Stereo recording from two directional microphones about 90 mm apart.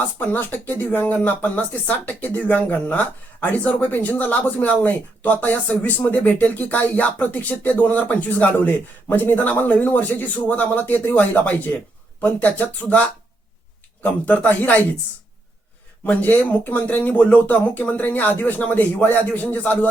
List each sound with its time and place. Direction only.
0.2 s speech: 20° left (ahead or behind)
14.0 s speech: 15° left (ahead or behind)
16.0 s speech: 20° left (ahead or behind)